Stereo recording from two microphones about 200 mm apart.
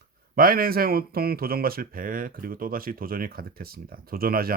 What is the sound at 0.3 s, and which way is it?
Speech, 45° right (ahead or behind).